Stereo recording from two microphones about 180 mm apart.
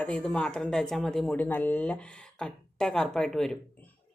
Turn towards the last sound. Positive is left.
turn(degrees=0)  # may be behind; listen again after turning